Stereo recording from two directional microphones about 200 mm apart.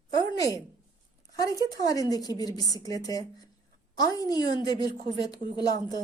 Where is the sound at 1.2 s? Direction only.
20° left (ahead or behind).